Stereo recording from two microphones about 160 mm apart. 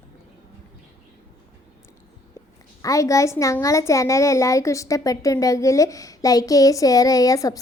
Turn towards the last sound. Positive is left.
turn(degrees=20)  # may be behind; listen again after turning